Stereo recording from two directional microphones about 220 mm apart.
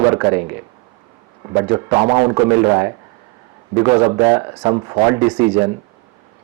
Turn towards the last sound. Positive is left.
turn(degrees=-15)  # may be behind; listen again after turning